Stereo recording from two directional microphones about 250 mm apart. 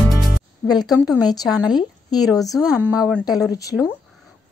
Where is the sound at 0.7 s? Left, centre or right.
Centre.